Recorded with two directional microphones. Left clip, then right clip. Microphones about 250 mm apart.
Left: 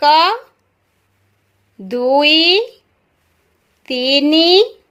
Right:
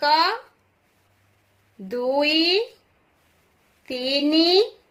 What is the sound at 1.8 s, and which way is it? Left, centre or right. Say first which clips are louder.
Speech: left 9 dB; left.